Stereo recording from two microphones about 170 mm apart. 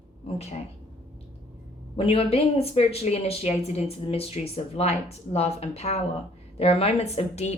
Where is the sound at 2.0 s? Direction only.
35° left (ahead or behind).